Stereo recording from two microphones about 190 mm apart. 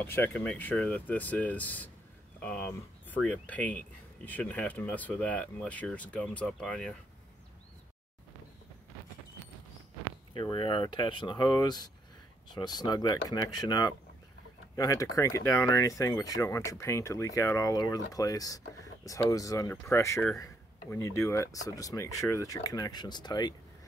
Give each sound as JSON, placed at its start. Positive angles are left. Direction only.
{"t": 0.0, "sound": "speech", "side_deg": 10}
{"t": 10.3, "sound": "speech", "side_deg": 25}